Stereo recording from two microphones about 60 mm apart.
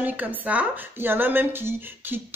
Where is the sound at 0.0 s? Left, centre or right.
Right.